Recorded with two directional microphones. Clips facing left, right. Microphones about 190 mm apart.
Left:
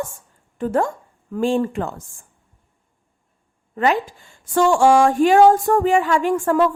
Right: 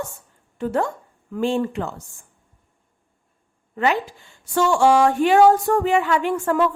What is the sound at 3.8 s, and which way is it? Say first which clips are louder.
A woman's voice: left 2 dB; 45° left (ahead or behind).